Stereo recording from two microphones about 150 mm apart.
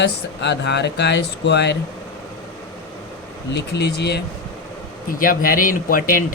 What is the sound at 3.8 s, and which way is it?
Speech, 90° left.